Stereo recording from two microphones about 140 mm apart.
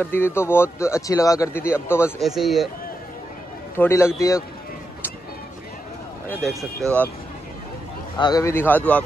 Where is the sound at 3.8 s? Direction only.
20° left (ahead or behind).